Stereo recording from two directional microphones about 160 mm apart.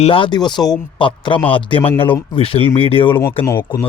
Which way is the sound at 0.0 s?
35° left (ahead or behind).